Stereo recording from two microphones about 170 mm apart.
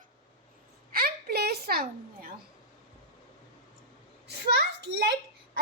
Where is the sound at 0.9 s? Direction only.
60° right (ahead or behind).